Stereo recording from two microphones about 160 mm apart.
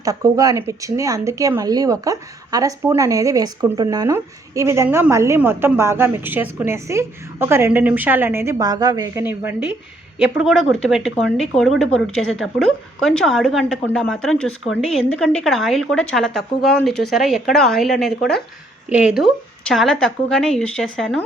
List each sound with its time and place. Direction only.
0.0 s speech: 20° right (ahead or behind)
9.2 s speech: 10° right (ahead or behind); by 21.2 s 5° left (ahead or behind)